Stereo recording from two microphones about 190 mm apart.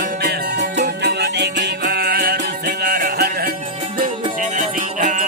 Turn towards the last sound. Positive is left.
turn(degrees=-40)  # may be behind; listen again after turning